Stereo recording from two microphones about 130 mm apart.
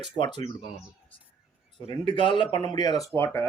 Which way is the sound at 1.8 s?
40° left (ahead or behind).